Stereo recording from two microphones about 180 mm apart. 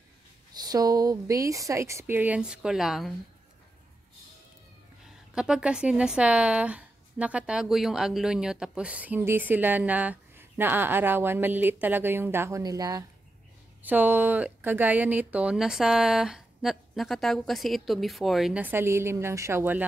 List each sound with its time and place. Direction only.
0.5 s speech: 20° right (ahead or behind); by 3.1 s centre (ahead or behind)
5.3 s speech: 5° right (ahead or behind); by 13.0 s 20° right (ahead or behind)
13.8 s speech: 10° right (ahead or behind)